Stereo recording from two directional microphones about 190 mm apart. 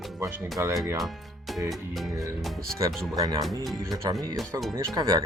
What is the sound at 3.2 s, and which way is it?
Speech, 20° right (ahead or behind).